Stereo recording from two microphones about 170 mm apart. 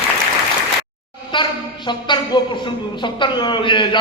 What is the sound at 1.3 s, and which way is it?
A woman's voice, 25° left (ahead or behind).